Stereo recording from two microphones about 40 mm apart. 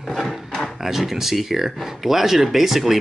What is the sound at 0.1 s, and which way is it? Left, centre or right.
Speech, centre.